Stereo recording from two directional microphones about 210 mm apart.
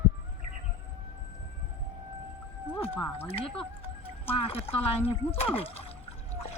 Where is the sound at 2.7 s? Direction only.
10° left (ahead or behind).